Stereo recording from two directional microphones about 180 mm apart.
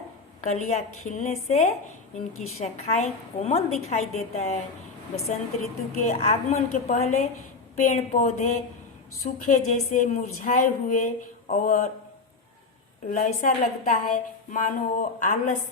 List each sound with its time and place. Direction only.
0.4 s a woman's voice: 40° left (ahead or behind)
6.0 s a woman's voice: 45° left (ahead or behind)
13.1 s a woman's voice: 45° left (ahead or behind)